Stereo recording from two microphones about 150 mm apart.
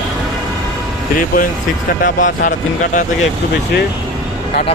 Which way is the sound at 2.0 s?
65° left (ahead or behind).